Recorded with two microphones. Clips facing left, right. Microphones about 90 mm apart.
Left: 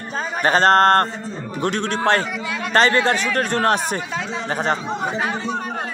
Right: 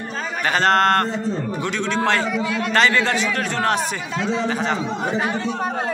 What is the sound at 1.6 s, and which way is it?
Speech, 50° left (ahead or behind).